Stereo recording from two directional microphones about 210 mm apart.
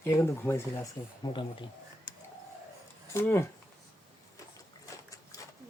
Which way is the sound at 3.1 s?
10° left (ahead or behind).